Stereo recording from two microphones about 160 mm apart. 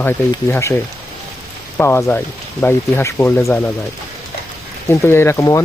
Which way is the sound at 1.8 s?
15° left (ahead or behind).